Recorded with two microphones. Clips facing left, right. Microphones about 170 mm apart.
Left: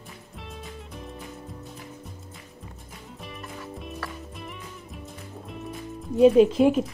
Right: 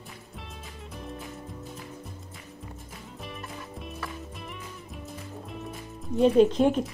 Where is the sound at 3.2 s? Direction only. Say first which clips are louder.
Left 1 dB; centre (ahead or behind).